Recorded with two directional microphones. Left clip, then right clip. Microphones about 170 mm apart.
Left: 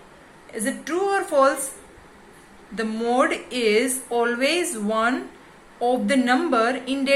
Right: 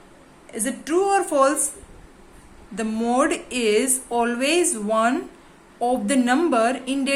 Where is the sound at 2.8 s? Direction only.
40° right (ahead or behind).